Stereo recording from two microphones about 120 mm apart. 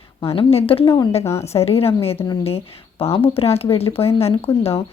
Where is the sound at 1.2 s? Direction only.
25° left (ahead or behind).